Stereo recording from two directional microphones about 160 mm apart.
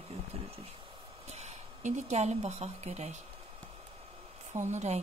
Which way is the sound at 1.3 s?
45° right (ahead or behind).